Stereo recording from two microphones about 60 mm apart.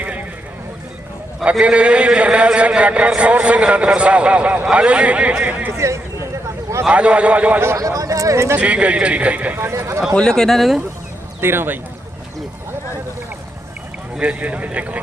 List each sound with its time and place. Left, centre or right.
1.5 s a man's voice: centre
5.7 s speech: right
6.8 s a man's voice: centre
7.8 s a sound: right
8.5 s a man's voice: centre
9.6 s speech: right
10.2 s speech: centre
11.3 s speech: right
14.2 s a man's voice: right